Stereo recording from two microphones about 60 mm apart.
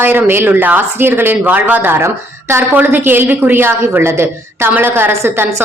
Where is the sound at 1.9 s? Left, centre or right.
Right.